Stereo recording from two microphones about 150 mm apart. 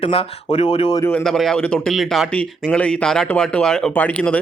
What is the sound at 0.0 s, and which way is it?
Speech, 40° left (ahead or behind).